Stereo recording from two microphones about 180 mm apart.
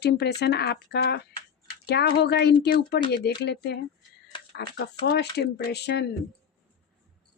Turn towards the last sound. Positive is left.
turn(degrees=65)  # may be behind; listen again after turning